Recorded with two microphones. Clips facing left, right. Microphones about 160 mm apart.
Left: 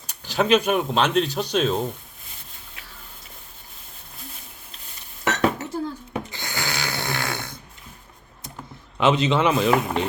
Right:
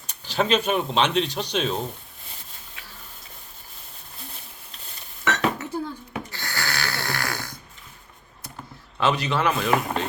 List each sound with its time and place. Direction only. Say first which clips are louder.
0.1 s speech: left 3 dB; 10° left (ahead or behind)
5.2 s dishes: left 2 dB; 40° left (ahead or behind)
6.3 s snoring: left 1 dB; 20° left (ahead or behind)
9.0 s a man's voice: left 4 dB; 20° left (ahead or behind)